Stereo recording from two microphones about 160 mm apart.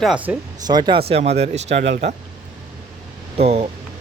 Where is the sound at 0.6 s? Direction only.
25° right (ahead or behind); by 1.9 s 45° right (ahead or behind).